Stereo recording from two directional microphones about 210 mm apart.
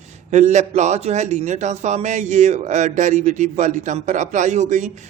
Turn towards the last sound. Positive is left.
turn(degrees=-35)  # may be behind; listen again after turning